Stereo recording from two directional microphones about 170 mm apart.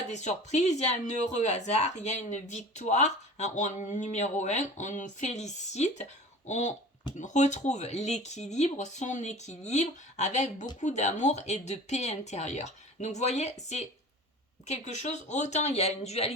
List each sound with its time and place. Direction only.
0.1 s speech: 40° left (ahead or behind)